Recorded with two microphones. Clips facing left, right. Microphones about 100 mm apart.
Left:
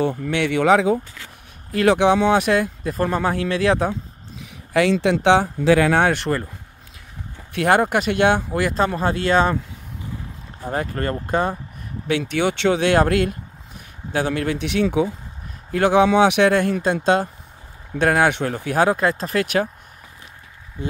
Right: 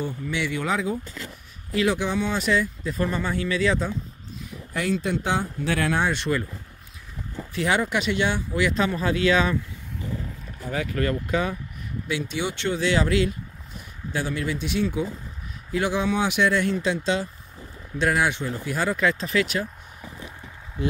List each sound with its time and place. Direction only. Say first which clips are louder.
0.0 s speech: left 7 dB; 85° left
1.7 s speech: left 8 dB; 60° left (ahead or behind)
4.4 s speech: left 11 dB; 90° left; by 6.4 s 55° left (ahead or behind)
7.5 s speech: left 6 dB; 55° left (ahead or behind)
10.6 s speech: left 2 dB; 40° left (ahead or behind)
12.1 s speech: left 8 dB; 60° left (ahead or behind)
15.7 s speech: left 8 dB; 60° left (ahead or behind)
19.0 s speech: left 2 dB; 45° left (ahead or behind)